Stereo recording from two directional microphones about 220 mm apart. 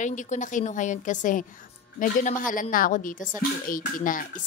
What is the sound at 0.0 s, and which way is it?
A woman's voice, 35° left (ahead or behind).